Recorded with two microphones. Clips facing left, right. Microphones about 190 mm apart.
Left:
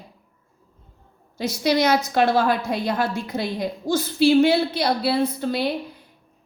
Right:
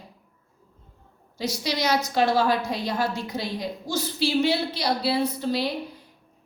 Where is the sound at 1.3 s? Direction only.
55° left (ahead or behind).